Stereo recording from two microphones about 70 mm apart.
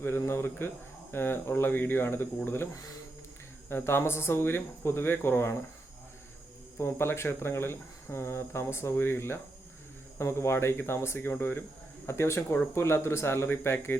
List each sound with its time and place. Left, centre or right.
0.2 s speech: left
3.7 s speech: left
6.7 s speech: left